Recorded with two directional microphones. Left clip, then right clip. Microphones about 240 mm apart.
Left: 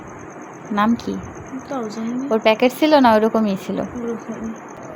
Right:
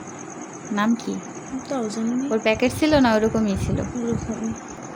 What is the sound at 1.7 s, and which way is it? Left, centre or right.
Speech, right.